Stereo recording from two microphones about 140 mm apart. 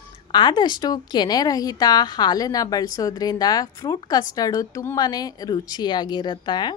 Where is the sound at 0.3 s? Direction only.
35° left (ahead or behind).